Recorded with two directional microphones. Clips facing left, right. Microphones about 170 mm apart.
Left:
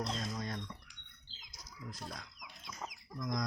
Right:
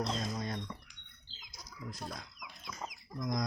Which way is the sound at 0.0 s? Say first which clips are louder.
Right 3 dB; 20° right (ahead or behind).